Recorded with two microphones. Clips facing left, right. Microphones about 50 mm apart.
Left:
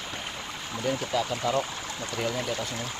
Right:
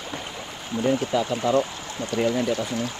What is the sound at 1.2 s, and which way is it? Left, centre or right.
Speech, right.